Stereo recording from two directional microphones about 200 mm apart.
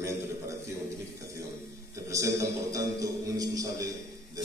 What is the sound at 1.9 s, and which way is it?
A man's voice, 15° right (ahead or behind).